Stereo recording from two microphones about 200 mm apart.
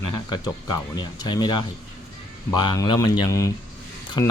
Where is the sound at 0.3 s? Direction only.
20° left (ahead or behind).